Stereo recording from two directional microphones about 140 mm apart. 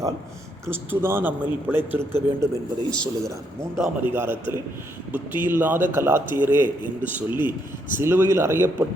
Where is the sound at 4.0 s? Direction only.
15° right (ahead or behind).